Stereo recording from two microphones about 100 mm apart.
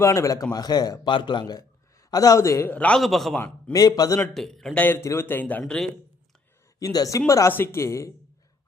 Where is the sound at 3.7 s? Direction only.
40° left (ahead or behind).